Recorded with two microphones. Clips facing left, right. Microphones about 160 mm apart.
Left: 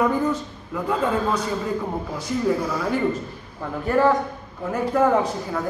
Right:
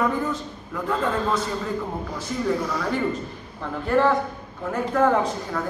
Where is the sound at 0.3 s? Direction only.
10° left (ahead or behind).